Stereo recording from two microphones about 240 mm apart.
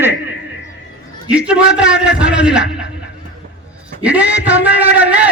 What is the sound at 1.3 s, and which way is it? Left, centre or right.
A man's voice, centre.